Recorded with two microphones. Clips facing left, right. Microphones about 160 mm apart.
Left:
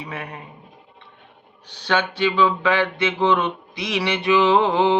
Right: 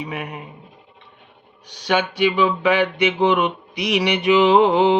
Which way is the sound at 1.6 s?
15° right (ahead or behind).